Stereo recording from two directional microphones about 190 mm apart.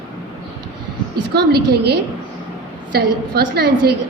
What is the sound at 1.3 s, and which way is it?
A woman's voice, 55° right (ahead or behind).